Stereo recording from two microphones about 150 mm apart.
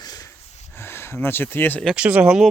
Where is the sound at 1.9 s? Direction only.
10° right (ahead or behind).